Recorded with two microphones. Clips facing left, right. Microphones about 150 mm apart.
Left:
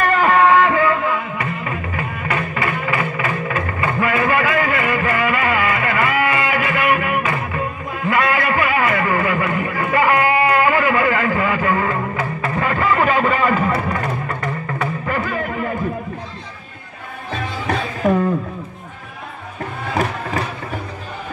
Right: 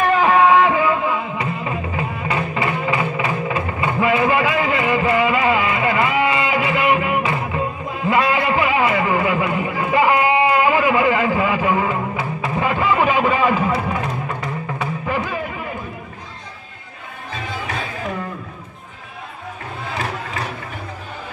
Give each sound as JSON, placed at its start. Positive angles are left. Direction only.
{"t": 0.0, "sound": "music", "side_deg": -5}